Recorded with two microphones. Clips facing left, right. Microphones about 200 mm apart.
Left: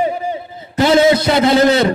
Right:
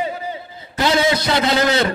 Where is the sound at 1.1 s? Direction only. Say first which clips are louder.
Left 6 dB; 25° left (ahead or behind).